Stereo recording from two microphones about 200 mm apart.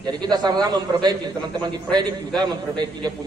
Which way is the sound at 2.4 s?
20° right (ahead or behind).